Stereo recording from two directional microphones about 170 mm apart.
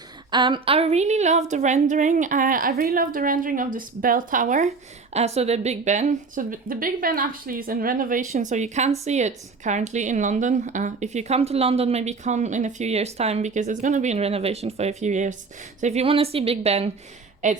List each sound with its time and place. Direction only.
0.3 s a woman's voice: 25° right (ahead or behind); by 4.7 s 50° right (ahead or behind)
5.1 s a woman's voice: 40° right (ahead or behind)
17.4 s a woman's voice: 45° right (ahead or behind)